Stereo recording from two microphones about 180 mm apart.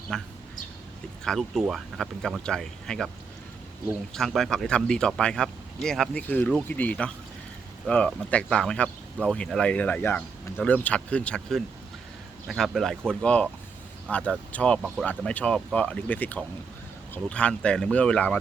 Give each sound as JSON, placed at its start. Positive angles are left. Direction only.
{"t": 0.1, "sound": "speech", "side_deg": 5}
{"t": 4.1, "sound": "speech", "side_deg": 0}